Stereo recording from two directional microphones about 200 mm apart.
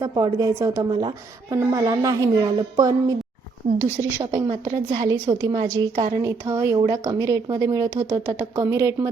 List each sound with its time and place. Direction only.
0.0 s a woman's voice: 20° right (ahead or behind)